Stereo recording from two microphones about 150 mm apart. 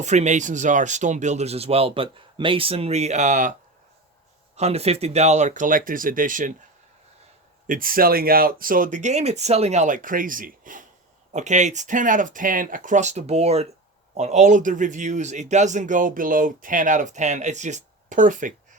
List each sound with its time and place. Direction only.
0.0 s speech: 50° right (ahead or behind)
4.5 s speech: 45° right (ahead or behind); by 6.6 s 60° right (ahead or behind)
7.7 s speech: 70° right (ahead or behind)
11.3 s speech: 50° right (ahead or behind)